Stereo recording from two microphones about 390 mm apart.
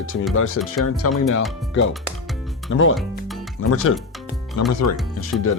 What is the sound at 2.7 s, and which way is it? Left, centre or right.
Speech, left.